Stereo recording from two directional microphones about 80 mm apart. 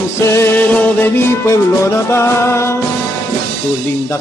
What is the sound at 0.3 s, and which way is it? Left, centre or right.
Music, left.